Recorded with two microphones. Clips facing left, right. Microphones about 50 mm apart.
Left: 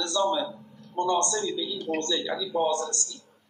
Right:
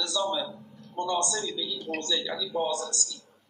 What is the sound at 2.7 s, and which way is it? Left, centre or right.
Speech, left.